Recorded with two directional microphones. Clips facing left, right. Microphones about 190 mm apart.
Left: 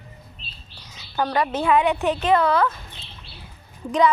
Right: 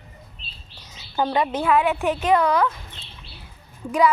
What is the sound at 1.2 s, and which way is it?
Speech, 20° right (ahead or behind).